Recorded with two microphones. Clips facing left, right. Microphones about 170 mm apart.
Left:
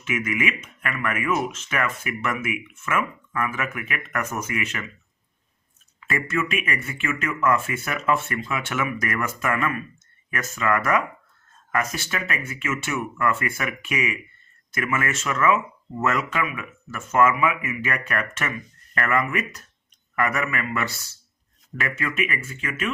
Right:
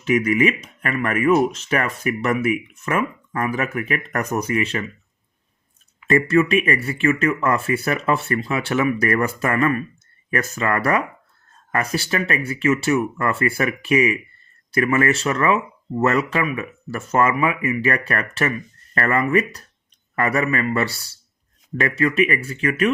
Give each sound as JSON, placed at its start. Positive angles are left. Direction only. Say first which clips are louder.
{"t": 0.0, "sound": "speech", "louder": "right 8 dB", "side_deg": -35}
{"t": 6.1, "sound": "speech", "louder": "right 9 dB", "side_deg": -35}